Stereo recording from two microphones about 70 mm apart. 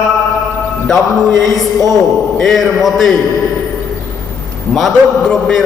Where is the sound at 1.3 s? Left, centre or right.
Right.